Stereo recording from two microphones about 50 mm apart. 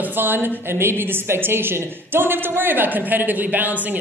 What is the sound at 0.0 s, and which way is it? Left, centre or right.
A woman's voice, right.